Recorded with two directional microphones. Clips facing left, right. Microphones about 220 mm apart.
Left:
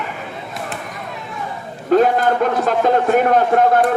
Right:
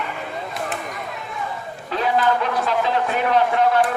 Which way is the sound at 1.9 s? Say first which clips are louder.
Left 7 dB; 45° left (ahead or behind).